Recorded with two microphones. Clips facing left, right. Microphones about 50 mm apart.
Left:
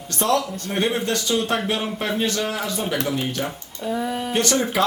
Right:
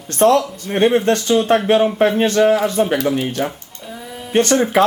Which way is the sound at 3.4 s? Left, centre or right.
Right.